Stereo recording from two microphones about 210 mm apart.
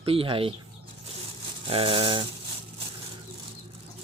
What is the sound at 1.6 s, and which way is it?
Speech, 25° right (ahead or behind).